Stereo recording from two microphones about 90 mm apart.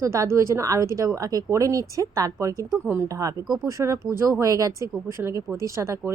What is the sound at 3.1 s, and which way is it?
Speech, 40° right (ahead or behind).